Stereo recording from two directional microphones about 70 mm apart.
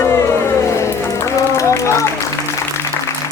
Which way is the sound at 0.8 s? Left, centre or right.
Left.